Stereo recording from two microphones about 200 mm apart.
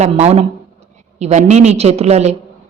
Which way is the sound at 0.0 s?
35° right (ahead or behind).